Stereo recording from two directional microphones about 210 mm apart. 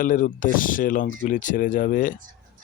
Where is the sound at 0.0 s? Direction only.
40° left (ahead or behind).